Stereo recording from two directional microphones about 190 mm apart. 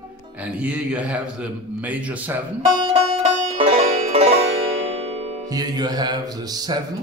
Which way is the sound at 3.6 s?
30° right (ahead or behind).